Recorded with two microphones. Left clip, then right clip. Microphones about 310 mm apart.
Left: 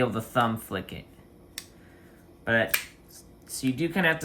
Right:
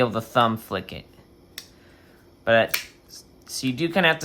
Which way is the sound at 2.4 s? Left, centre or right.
Centre.